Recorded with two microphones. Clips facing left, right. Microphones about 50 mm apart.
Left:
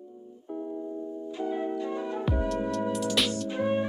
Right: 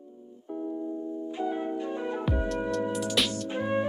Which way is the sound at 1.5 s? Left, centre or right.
Right.